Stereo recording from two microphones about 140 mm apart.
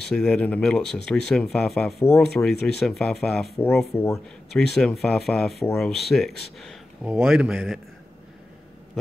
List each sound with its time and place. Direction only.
0.1 s speech: 5° left (ahead or behind)
3.9 s speech: 20° left (ahead or behind)
4.5 s speech: 5° left (ahead or behind)